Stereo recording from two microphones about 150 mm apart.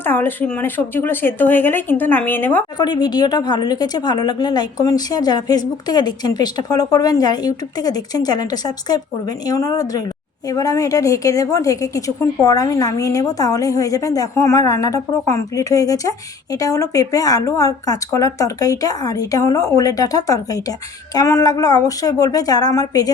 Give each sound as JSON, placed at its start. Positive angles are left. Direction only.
{"t": 0.0, "sound": "speech", "side_deg": 15}
{"t": 2.7, "sound": "a woman's voice", "side_deg": 30}